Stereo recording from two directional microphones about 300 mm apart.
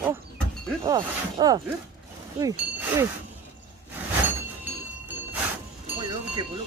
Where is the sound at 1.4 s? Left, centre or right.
Centre.